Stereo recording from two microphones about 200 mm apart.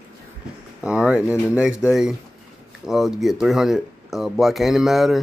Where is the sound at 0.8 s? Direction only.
5° right (ahead or behind).